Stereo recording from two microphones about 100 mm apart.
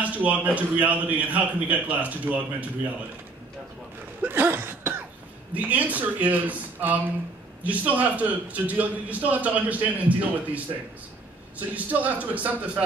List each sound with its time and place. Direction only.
0.0 s a man's voice: 15° right (ahead or behind)
4.2 s cough: 20° right (ahead or behind)
5.5 s a man's voice: 15° right (ahead or behind)